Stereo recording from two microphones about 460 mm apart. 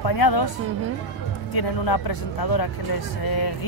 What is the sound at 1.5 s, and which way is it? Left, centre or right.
Speech, left.